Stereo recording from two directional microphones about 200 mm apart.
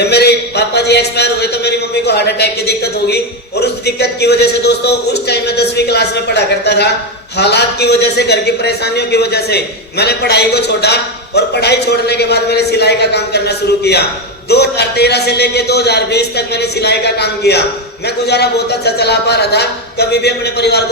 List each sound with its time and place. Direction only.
0.0 s a man's voice: 55° left (ahead or behind)